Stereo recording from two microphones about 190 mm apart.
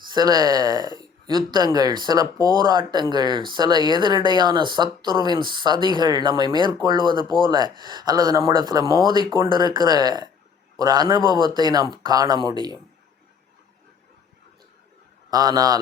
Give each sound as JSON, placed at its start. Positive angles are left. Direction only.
{"t": 0.1, "sound": "speech", "side_deg": -20}
{"t": 15.3, "sound": "speech", "side_deg": -20}